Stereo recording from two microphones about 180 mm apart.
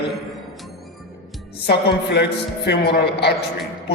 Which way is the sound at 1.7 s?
70° left (ahead or behind).